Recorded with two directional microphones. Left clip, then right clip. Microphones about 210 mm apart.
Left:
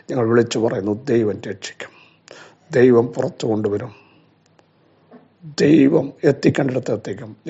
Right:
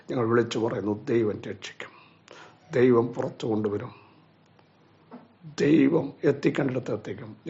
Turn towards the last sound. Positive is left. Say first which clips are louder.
# left 8 dB
turn(degrees=25)  # may be behind; listen again after turning